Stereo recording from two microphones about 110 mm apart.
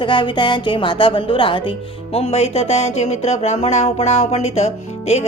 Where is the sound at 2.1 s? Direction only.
70° left (ahead or behind).